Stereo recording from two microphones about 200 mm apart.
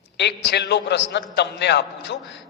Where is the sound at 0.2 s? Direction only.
60° left (ahead or behind).